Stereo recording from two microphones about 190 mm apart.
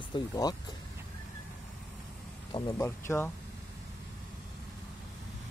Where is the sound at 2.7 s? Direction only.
15° left (ahead or behind).